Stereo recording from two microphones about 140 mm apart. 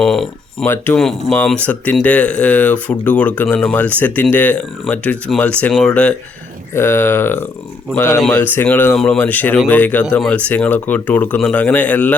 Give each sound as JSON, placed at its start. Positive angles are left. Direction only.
{"t": 0.0, "sound": "speech", "side_deg": 5}
{"t": 0.6, "sound": "speech", "side_deg": 15}